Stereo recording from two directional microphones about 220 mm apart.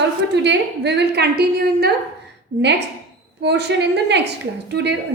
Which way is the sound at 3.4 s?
50° right (ahead or behind).